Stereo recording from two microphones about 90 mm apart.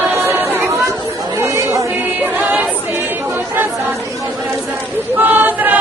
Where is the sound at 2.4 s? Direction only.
15° right (ahead or behind).